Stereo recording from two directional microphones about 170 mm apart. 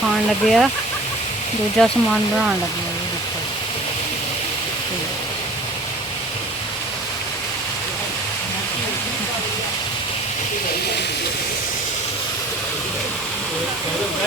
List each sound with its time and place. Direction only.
0.4 s speech: centre (ahead or behind)
1.8 s speech: centre (ahead or behind)